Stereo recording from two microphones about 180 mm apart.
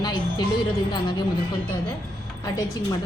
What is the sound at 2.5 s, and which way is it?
Speech, 20° left (ahead or behind).